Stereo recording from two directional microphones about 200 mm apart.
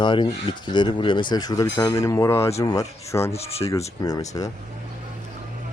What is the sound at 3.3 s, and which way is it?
Speech, 30° left (ahead or behind).